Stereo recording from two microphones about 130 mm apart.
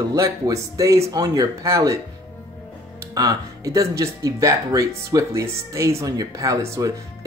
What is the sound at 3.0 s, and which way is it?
Speech, 25° right (ahead or behind).